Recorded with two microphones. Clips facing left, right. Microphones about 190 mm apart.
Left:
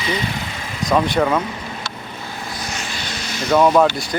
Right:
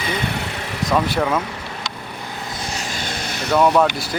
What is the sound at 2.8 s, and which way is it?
Vehicle, 50° right (ahead or behind).